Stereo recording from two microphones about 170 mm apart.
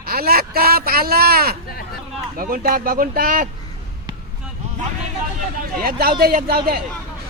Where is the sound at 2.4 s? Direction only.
60° right (ahead or behind).